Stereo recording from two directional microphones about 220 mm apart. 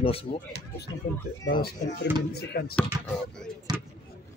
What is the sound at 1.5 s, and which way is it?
Speech, 40° left (ahead or behind).